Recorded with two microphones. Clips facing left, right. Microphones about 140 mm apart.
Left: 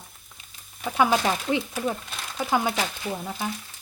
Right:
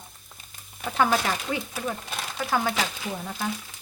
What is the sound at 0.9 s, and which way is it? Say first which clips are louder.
Frying: left 1 dB; 10° left (ahead or behind).